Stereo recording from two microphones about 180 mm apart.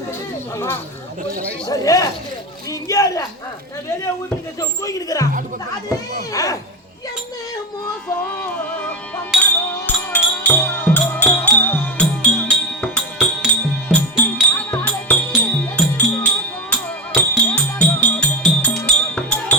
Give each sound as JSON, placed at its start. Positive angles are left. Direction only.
{"t": 1.6, "sound": "speech", "side_deg": 20}
{"t": 4.6, "sound": "speech", "side_deg": 20}
{"t": 6.3, "sound": "speech", "side_deg": 20}
{"t": 9.4, "sound": "music", "side_deg": 10}